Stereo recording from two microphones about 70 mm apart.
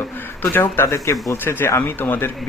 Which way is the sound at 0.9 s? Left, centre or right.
Left.